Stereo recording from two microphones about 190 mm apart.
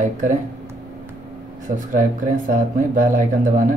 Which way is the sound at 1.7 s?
45° right (ahead or behind).